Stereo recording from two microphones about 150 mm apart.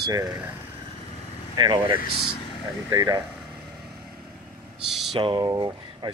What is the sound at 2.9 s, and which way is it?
Speech, 25° right (ahead or behind).